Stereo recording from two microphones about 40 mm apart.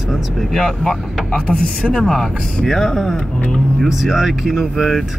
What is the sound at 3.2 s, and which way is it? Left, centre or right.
Speech, left.